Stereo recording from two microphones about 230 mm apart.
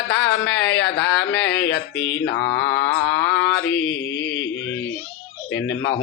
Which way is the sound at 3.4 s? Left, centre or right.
Left.